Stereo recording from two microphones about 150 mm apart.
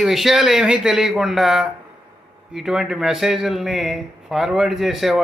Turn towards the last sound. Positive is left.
turn(degrees=0)  # may be behind; listen again after turning